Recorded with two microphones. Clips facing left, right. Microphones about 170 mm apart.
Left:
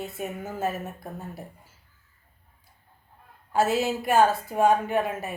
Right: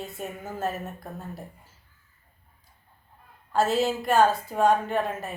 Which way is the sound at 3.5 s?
10° left (ahead or behind).